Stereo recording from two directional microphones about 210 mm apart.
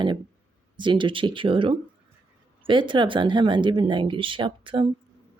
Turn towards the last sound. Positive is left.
turn(degrees=-25)  # may be behind; listen again after turning